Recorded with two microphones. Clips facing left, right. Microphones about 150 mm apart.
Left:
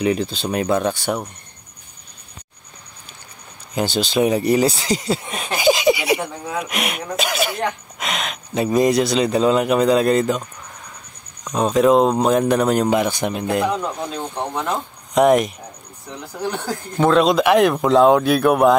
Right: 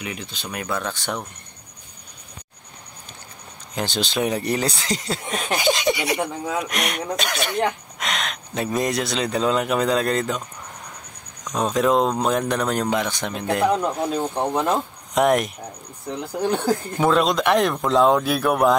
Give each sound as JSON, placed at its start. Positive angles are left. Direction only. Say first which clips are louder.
{"t": 0.0, "sound": "speech", "louder": "left 13 dB", "side_deg": 35}
{"t": 0.9, "sound": "speech", "louder": "left 5 dB", "side_deg": 10}
{"t": 3.7, "sound": "speech", "louder": "left 5 dB", "side_deg": 5}
{"t": 11.4, "sound": "speech", "louder": "left 5 dB", "side_deg": 0}
{"t": 14.1, "sound": "speech", "louder": "right 3 dB", "side_deg": -10}
{"t": 15.1, "sound": "speech", "louder": "left 4 dB", "side_deg": 0}
{"t": 16.3, "sound": "speech", "louder": "right 4 dB", "side_deg": -20}
{"t": 17.0, "sound": "speech", "louder": "left 5 dB", "side_deg": 0}